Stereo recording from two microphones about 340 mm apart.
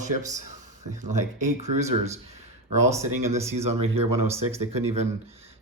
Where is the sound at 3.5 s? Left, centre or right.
Right.